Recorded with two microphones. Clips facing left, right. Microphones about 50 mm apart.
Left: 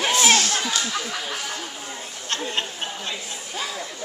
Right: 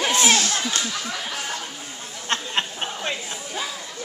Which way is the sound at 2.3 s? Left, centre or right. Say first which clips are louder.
Right 2 dB; right.